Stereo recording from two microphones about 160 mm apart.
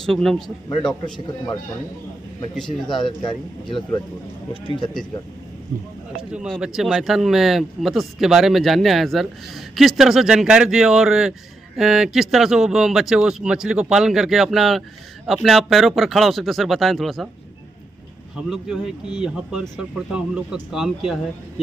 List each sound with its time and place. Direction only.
0.0 s speech: 5° left (ahead or behind)
2.6 s speech: 30° left (ahead or behind)
6.3 s speech: centre (ahead or behind)
18.5 s speech: 5° right (ahead or behind)